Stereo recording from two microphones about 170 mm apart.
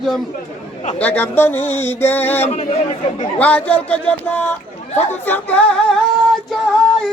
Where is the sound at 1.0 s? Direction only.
10° left (ahead or behind).